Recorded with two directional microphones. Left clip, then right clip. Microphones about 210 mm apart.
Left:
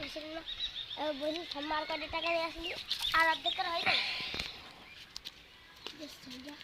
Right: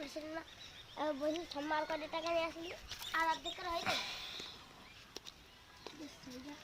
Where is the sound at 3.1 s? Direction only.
30° left (ahead or behind).